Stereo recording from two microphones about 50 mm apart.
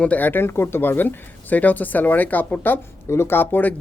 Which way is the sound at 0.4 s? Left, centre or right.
Left.